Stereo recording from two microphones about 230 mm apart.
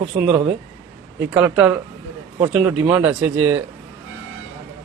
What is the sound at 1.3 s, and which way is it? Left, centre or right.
A man's voice, centre.